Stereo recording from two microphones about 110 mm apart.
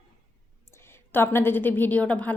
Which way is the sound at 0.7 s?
25° left (ahead or behind).